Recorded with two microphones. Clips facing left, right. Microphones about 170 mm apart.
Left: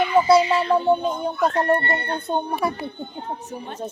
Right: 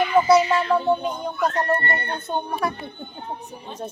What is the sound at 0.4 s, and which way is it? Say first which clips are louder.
Speech: left 1 dB; 15° left (ahead or behind).